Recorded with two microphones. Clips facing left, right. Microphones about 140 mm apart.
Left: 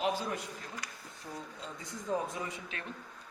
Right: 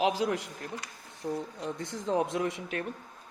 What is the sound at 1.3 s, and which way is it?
Speech, 75° right (ahead or behind).